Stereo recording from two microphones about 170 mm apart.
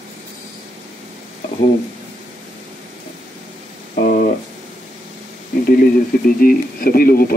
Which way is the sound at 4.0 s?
55° left (ahead or behind).